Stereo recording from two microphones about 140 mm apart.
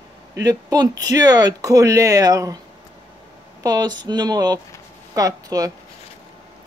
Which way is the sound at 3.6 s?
25° right (ahead or behind).